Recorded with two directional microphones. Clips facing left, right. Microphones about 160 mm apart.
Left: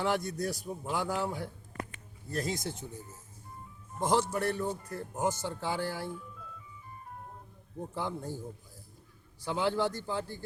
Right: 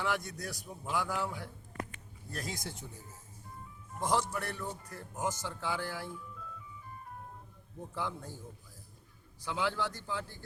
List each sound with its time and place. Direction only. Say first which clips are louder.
0.0 s a man's voice: left 5 dB; 30° left (ahead or behind)
4.0 s a man's voice: left 4 dB; 30° left (ahead or behind)
7.9 s a man's voice: left 2 dB; 30° left (ahead or behind)
9.4 s a man's voice: left 5 dB; 30° left (ahead or behind)